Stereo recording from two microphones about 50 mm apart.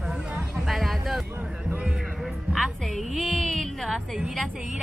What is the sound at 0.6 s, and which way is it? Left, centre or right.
Speech, centre.